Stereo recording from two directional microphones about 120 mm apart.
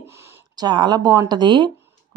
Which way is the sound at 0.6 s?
40° right (ahead or behind).